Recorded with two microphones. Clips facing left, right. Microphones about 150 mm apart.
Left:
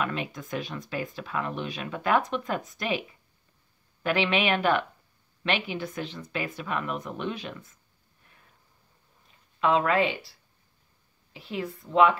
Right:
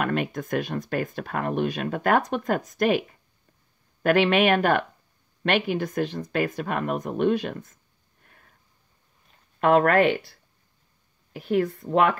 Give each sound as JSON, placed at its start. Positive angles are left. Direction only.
{"t": 0.0, "sound": "speech", "side_deg": -55}
{"t": 9.6, "sound": "speech", "side_deg": -55}